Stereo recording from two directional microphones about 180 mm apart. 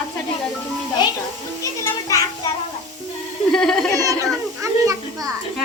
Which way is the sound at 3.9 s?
20° right (ahead or behind).